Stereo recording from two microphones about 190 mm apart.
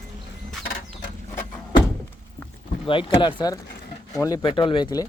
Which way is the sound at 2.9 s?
25° left (ahead or behind).